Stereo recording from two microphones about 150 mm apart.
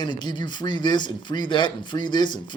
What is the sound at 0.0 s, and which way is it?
Speech, 30° left (ahead or behind).